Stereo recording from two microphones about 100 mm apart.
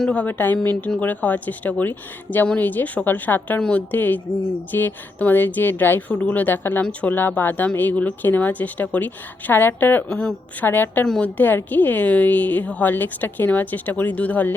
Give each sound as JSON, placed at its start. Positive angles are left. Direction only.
{"t": 0.0, "sound": "a woman's voice", "side_deg": 10}
{"t": 10.1, "sound": "a woman's voice", "side_deg": 5}
{"t": 10.6, "sound": "a woman's voice", "side_deg": 20}